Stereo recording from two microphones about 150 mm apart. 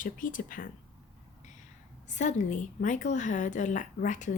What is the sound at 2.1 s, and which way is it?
Speech, 55° left (ahead or behind).